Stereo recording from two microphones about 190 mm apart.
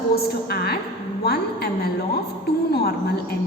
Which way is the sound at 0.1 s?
55° left (ahead or behind).